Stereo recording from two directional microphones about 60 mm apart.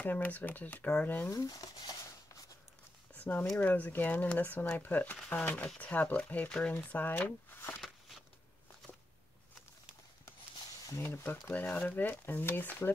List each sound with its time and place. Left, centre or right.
0.0 s speech: left
1.3 s speech: left
3.2 s a sound: left
3.5 s speech: left
10.9 s speech: left
11.5 s speech: left